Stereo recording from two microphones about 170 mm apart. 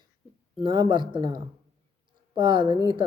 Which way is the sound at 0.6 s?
30° right (ahead or behind).